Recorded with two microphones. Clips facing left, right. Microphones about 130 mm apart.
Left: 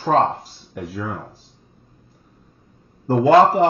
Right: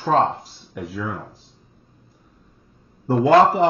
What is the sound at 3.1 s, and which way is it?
Speech, centre (ahead or behind).